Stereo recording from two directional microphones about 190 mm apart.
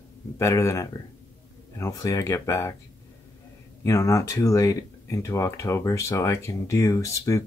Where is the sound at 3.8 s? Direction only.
15° left (ahead or behind).